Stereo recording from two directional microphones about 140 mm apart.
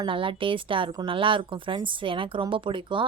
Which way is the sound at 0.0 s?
40° right (ahead or behind).